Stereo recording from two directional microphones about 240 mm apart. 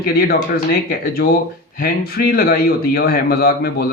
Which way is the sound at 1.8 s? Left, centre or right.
Left.